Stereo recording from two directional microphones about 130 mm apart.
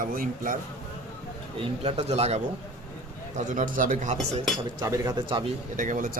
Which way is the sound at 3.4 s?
85° right.